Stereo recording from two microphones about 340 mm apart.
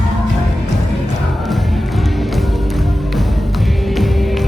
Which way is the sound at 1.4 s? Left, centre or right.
Centre.